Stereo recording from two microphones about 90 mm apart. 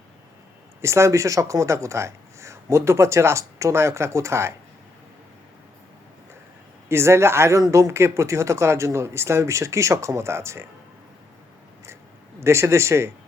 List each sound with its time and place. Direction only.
0.8 s speech: 30° right (ahead or behind)
6.8 s speech: 30° right (ahead or behind)
12.4 s speech: 30° right (ahead or behind)